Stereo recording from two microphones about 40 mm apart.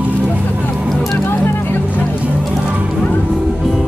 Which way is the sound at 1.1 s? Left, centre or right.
Left.